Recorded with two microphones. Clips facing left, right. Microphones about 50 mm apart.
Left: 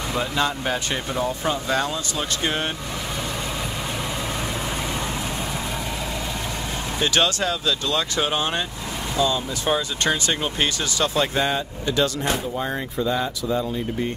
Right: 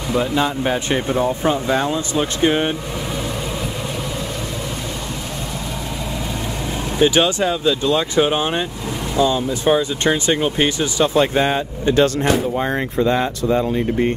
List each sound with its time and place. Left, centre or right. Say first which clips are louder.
0.1 s speech: right 6 dB; centre
0.8 s speech: right 6 dB; right
7.0 s speech: right 6 dB; centre; by 12.1 s right
13.0 s speech: right 6 dB; right